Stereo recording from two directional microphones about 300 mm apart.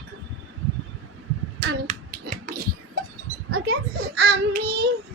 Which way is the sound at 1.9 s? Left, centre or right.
Right.